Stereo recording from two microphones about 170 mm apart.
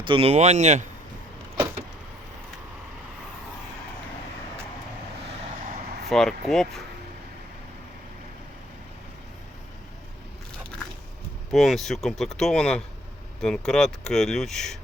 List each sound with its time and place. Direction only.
0.0 s speech: 30° right (ahead or behind)
6.1 s speech: centre (ahead or behind)
11.5 s speech: centre (ahead or behind)